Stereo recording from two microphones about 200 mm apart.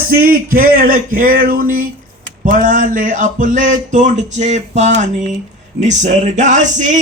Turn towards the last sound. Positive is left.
turn(degrees=-40)  # may be behind; listen again after turning